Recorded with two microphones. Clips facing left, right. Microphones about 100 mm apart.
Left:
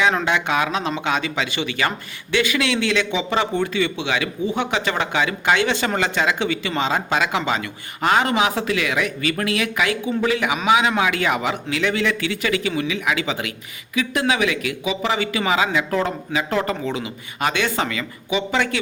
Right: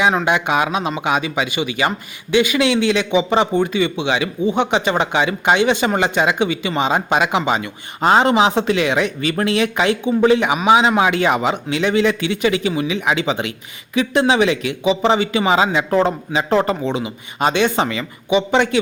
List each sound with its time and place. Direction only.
0.3 s a man's voice: 15° right (ahead or behind)